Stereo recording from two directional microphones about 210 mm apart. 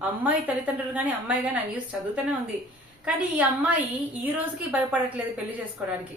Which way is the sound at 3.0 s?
5° right (ahead or behind).